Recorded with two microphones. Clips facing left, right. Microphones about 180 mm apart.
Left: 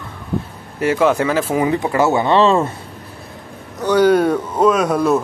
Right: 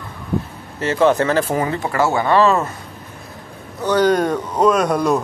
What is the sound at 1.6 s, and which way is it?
Speech, 20° left (ahead or behind).